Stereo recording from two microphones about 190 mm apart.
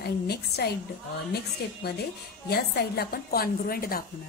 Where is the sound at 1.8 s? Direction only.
60° left (ahead or behind).